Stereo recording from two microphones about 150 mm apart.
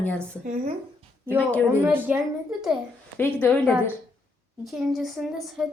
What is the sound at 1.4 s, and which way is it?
Speech, 10° left (ahead or behind).